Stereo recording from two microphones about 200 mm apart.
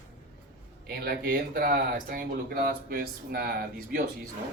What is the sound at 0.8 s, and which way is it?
Speech, 50° right (ahead or behind).